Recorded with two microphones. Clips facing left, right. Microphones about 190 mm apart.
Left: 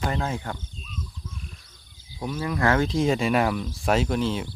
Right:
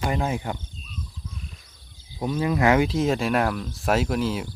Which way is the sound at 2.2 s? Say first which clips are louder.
Right 4 dB; 20° right (ahead or behind).